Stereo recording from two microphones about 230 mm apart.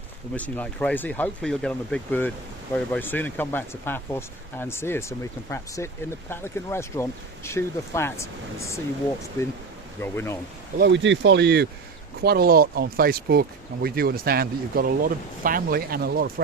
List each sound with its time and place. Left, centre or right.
0.3 s speech: centre
10.0 s speech: centre
10.8 s speech: right